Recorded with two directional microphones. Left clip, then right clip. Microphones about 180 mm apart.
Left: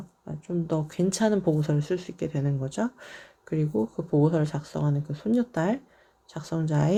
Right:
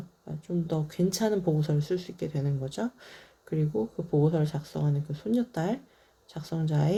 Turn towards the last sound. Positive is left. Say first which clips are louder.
# left 3 dB
turn(degrees=35)  # may be behind; listen again after turning